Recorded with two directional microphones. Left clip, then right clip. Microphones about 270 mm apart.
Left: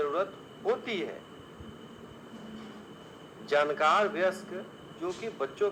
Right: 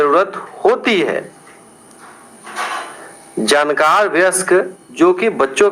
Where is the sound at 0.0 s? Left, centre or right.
Right.